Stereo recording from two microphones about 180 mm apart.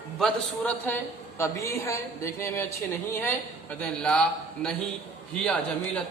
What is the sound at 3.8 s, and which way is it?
Speech, 5° left (ahead or behind).